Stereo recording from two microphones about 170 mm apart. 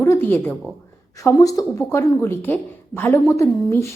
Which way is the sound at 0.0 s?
15° left (ahead or behind).